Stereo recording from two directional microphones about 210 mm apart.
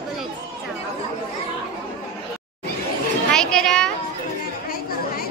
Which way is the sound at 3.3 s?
5° left (ahead or behind).